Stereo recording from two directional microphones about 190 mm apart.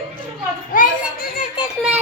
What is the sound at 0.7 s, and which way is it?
Children playing, 45° left (ahead or behind).